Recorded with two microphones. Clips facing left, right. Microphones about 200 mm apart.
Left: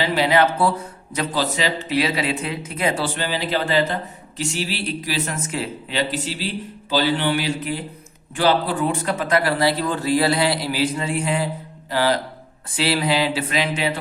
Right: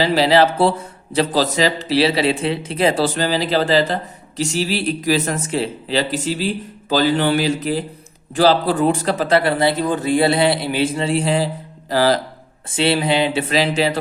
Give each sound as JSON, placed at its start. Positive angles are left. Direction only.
{"t": 0.0, "sound": "a man's voice", "side_deg": -35}
{"t": 12.7, "sound": "speech", "side_deg": -25}
{"t": 13.5, "sound": "a man's voice", "side_deg": -35}